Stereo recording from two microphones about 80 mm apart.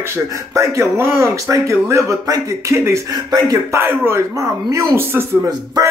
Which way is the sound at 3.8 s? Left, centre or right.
Right.